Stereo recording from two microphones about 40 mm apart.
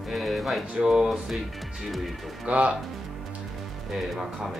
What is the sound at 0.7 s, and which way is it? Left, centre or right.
Speech, centre.